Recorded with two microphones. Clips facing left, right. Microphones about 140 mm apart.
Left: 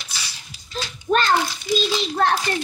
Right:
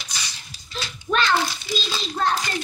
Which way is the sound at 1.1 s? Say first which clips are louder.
Left 3 dB; 35° left (ahead or behind).